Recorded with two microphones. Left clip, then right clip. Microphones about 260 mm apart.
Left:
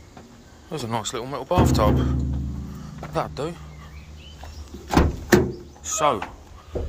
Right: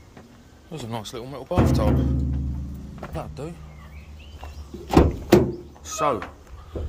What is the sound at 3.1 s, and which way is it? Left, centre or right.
Speech, centre.